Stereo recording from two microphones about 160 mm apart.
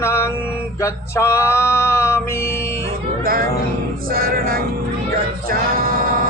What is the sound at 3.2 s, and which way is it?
Speech, 65° right (ahead or behind).